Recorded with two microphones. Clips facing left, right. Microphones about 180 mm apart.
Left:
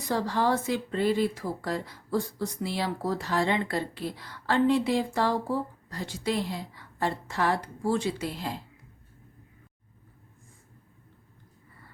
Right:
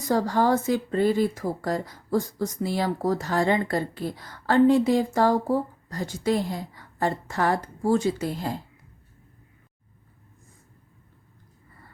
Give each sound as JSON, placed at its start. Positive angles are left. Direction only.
{"t": 0.1, "sound": "speech", "side_deg": -45}